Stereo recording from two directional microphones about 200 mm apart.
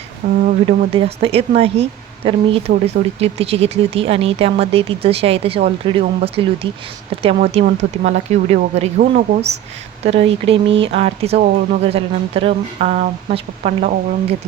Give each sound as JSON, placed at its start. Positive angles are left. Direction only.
{"t": 0.2, "sound": "speech", "side_deg": -35}
{"t": 10.0, "sound": "speech", "side_deg": -30}